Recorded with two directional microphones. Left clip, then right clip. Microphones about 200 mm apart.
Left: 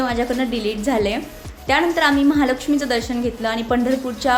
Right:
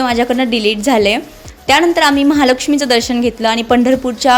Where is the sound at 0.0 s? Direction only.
40° right (ahead or behind).